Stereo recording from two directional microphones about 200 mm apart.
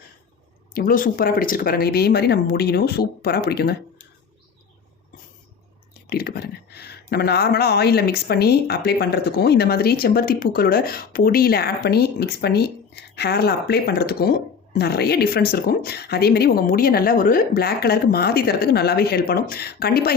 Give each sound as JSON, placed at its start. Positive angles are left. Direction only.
{"t": 0.7, "sound": "speech", "side_deg": 45}
{"t": 6.1, "sound": "speech", "side_deg": 50}